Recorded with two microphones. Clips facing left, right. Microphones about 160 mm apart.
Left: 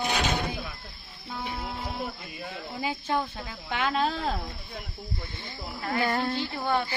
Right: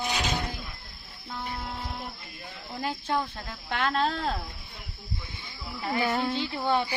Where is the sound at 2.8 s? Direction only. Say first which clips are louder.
Even; centre (ahead or behind).